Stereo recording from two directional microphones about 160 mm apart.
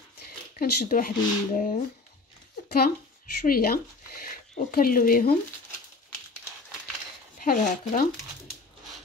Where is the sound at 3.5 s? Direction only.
65° left (ahead or behind).